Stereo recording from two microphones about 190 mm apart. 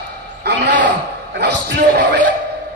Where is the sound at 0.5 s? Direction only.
70° right (ahead or behind).